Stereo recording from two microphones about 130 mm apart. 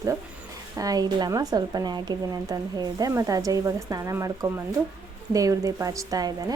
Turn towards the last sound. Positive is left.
turn(degrees=-25)  # may be behind; listen again after turning